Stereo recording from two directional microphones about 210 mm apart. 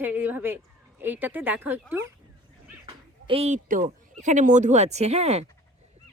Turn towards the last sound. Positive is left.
turn(degrees=-30)  # may be behind; listen again after turning